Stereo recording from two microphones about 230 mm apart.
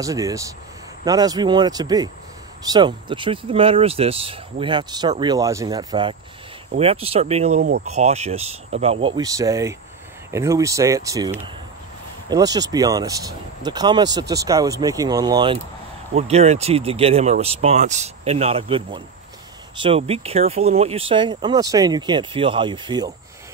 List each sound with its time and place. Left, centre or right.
0.0 s speech: centre